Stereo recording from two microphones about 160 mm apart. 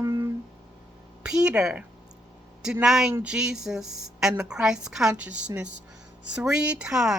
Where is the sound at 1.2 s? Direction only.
5° right (ahead or behind).